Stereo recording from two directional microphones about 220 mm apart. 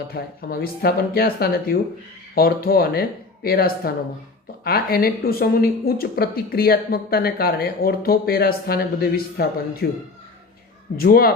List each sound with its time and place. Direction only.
0.1 s speech: 45° left (ahead or behind)